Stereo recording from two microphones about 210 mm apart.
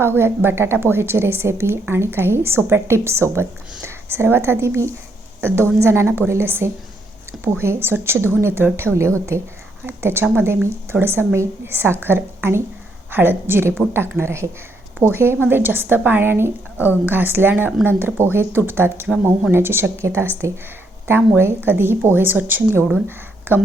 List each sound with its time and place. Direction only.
0.0 s a woman's voice: 10° right (ahead or behind)
21.3 s a woman's voice: 10° right (ahead or behind)